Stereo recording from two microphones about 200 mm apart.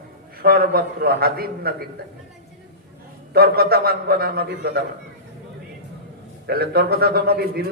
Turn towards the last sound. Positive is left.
turn(degrees=-50)  # may be behind; listen again after turning